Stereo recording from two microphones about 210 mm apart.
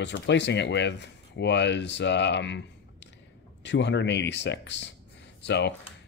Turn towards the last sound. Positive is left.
turn(degrees=55)  # may be behind; listen again after turning